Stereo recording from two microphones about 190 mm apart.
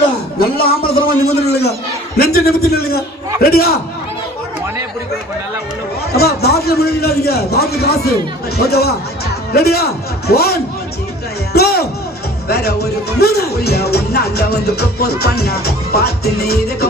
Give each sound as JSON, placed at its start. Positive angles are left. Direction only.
{"t": 0.3, "sound": "a man's voice", "side_deg": 55}
{"t": 6.1, "sound": "speech", "side_deg": 55}
{"t": 11.5, "sound": "music", "side_deg": 55}
{"t": 12.5, "sound": "speech", "side_deg": 55}